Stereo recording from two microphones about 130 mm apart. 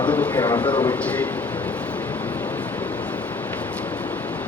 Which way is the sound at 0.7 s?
30° left (ahead or behind).